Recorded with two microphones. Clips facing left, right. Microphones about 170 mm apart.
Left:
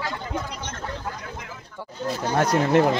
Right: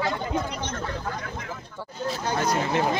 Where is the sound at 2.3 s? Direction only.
60° left (ahead or behind).